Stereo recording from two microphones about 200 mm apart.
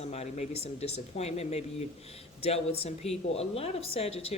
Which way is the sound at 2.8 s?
30° left (ahead or behind).